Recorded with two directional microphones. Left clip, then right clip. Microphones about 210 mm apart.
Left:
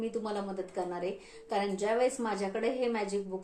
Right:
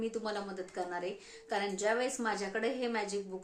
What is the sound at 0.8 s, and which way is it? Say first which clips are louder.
A woman's voice: left 2 dB; 15° right (ahead or behind).